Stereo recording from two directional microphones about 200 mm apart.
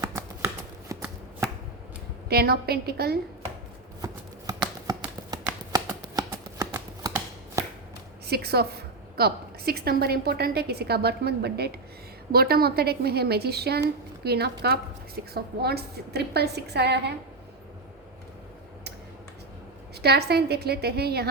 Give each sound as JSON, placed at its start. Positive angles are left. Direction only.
{"t": 0.0, "sound": "shuffling cards", "side_deg": -15}
{"t": 2.3, "sound": "a woman's voice", "side_deg": -50}
{"t": 4.0, "sound": "shuffling cards", "side_deg": -20}
{"t": 5.7, "sound": "a sound", "side_deg": -20}
{"t": 8.3, "sound": "a woman's voice", "side_deg": -50}
{"t": 20.0, "sound": "a woman's voice", "side_deg": -55}